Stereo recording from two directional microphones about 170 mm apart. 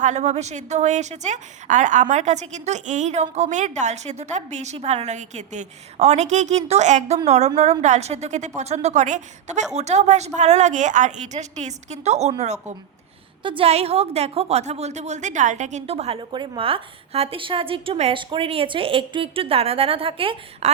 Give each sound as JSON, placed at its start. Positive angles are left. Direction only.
{"t": 0.0, "sound": "a woman's voice", "side_deg": -45}
{"t": 13.4, "sound": "a woman's voice", "side_deg": -30}